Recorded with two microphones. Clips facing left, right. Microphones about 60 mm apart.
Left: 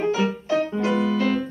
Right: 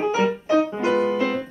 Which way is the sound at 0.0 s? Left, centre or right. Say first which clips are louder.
Right 2 dB; right.